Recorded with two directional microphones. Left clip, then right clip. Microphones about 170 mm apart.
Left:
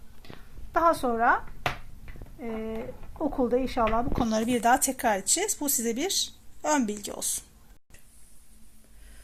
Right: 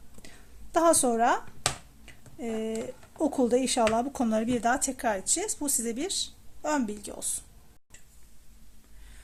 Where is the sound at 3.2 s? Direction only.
35° right (ahead or behind).